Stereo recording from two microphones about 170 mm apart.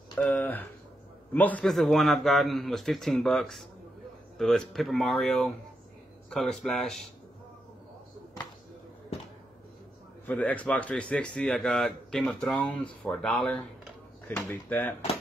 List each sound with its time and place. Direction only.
0.2 s a man's voice: 10° left (ahead or behind)
10.2 s speech: 10° left (ahead or behind)